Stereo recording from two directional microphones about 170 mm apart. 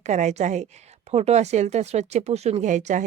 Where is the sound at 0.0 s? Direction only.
45° right (ahead or behind).